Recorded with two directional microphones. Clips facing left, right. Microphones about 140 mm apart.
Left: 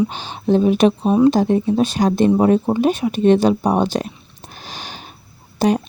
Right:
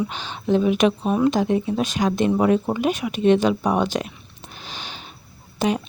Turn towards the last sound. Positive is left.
turn(degrees=40)  # may be behind; listen again after turning